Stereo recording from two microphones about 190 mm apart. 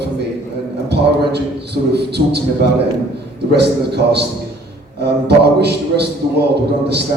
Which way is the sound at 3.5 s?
60° right (ahead or behind).